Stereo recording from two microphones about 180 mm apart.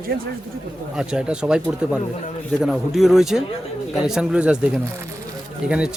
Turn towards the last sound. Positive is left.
turn(degrees=-5)  # may be behind; listen again after turning